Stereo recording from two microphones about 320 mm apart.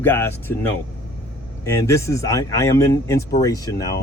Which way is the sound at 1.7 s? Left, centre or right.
Centre.